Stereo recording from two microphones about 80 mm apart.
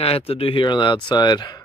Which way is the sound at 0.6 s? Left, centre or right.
Left.